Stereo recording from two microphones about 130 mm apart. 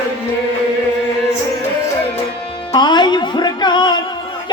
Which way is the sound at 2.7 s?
35° left (ahead or behind).